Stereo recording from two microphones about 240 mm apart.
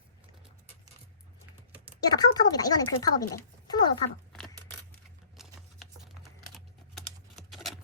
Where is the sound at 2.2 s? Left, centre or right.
Centre.